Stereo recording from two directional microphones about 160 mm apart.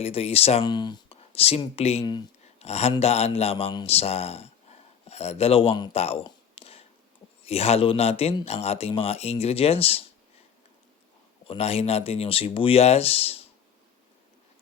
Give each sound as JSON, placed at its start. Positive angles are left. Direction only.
{"t": 0.0, "sound": "a man's voice", "side_deg": 40}
{"t": 0.6, "sound": "speech", "side_deg": 25}
{"t": 6.0, "sound": "a sound", "side_deg": 35}
{"t": 7.4, "sound": "a man's voice", "side_deg": 40}
{"t": 11.4, "sound": "a man's voice", "side_deg": 40}